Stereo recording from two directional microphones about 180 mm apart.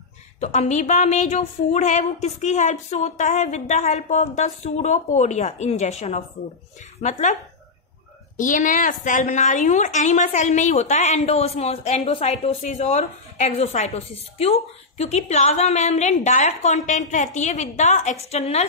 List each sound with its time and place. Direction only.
0.4 s a woman's voice: 40° left (ahead or behind)
8.4 s a woman's voice: 45° left (ahead or behind)